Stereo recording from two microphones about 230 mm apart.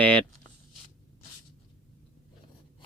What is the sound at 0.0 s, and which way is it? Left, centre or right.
Speech, centre.